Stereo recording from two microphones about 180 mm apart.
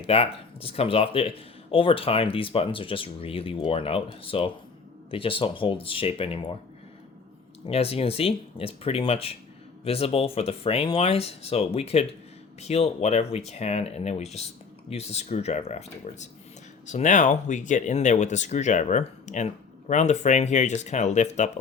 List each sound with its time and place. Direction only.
0.0 s speech: 30° left (ahead or behind)
7.7 s speech: 35° left (ahead or behind)